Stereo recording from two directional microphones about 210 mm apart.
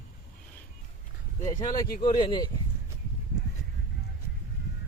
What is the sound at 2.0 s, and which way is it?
Speech, 20° left (ahead or behind).